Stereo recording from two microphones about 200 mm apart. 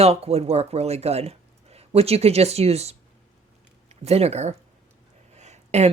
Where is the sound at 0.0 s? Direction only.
30° right (ahead or behind).